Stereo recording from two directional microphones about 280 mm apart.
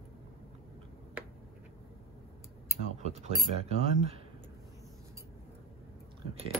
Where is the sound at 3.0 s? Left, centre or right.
Right.